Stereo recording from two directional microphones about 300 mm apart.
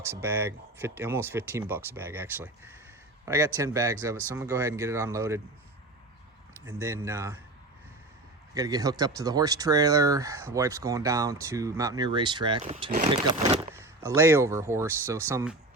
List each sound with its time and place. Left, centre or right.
0.0 s speech: centre
6.7 s speech: centre
8.5 s speech: centre
13.2 s speech: centre